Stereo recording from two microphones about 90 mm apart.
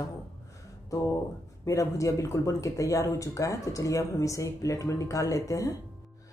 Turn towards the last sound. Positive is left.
turn(degrees=40)  # may be behind; listen again after turning